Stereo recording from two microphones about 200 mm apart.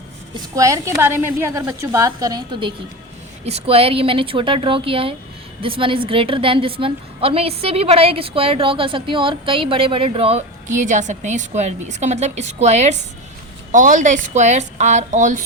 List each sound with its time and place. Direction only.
0.5 s a woman's voice: 15° right (ahead or behind); by 15.4 s 40° right (ahead or behind)